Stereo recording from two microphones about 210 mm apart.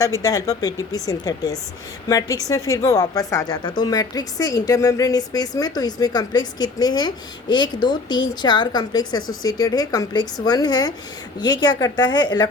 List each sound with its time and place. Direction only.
0.0 s a woman's voice: 15° left (ahead or behind)